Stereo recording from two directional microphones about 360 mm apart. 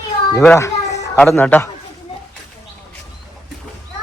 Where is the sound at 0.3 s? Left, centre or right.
Centre.